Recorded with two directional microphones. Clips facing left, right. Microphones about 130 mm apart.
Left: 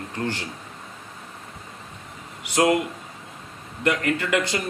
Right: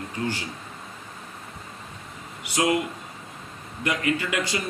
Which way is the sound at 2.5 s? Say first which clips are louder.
Left 4 dB; 55° left (ahead or behind).